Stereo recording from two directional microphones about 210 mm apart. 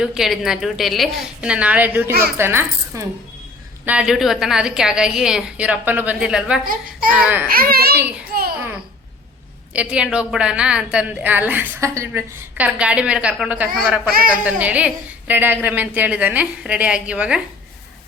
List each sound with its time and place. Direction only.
0.0 s a woman's voice: centre (ahead or behind)
6.7 s a child's voice: 40° right (ahead or behind)
7.1 s a woman's voice: 5° right (ahead or behind)
7.5 s a child's voice: 45° right (ahead or behind)
8.3 s babbling: 45° right (ahead or behind)
9.7 s a woman's voice: 5° right (ahead or behind)
14.1 s a child's voice: 45° right (ahead or behind)
14.4 s a woman's voice: 5° right (ahead or behind)